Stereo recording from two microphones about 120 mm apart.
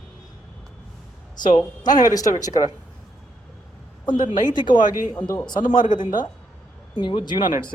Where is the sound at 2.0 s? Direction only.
30° left (ahead or behind).